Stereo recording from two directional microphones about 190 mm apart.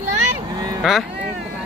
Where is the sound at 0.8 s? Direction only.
Centre (ahead or behind).